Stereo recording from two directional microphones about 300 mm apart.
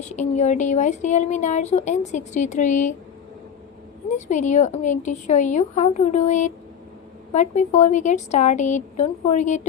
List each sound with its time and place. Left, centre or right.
0.1 s speech: left
4.3 s speech: left